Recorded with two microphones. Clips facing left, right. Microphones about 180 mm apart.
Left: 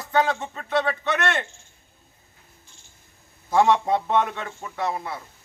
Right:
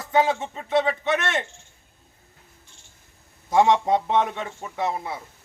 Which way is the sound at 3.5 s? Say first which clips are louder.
Right 1 dB; 20° right (ahead or behind).